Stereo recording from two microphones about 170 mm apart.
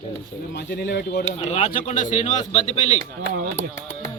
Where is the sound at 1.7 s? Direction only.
50° left (ahead or behind).